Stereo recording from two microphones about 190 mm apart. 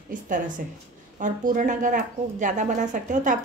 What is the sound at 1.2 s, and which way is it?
A woman's voice, 45° right (ahead or behind).